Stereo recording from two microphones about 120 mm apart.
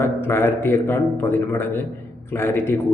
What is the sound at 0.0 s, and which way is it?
A man's voice, 20° left (ahead or behind).